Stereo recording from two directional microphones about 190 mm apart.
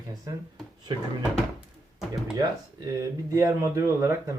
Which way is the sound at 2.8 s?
15° right (ahead or behind).